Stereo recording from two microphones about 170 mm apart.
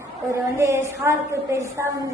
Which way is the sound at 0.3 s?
15° right (ahead or behind).